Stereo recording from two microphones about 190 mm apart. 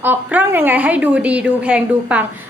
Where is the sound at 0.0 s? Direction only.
10° right (ahead or behind).